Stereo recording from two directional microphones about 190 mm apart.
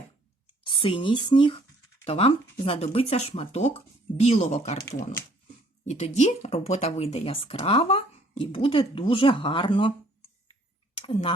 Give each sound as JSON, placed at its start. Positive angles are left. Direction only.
{"t": 0.6, "sound": "speech", "side_deg": 30}
{"t": 5.8, "sound": "speech", "side_deg": 35}
{"t": 10.9, "sound": "speech", "side_deg": 30}